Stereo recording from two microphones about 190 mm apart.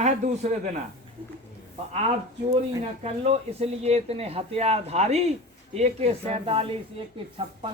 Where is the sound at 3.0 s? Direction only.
35° right (ahead or behind).